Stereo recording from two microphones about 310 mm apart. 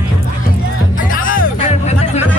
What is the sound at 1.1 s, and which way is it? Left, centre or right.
Music, left.